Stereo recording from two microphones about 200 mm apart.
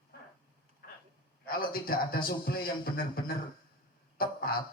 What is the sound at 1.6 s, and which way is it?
Speech, 45° left (ahead or behind).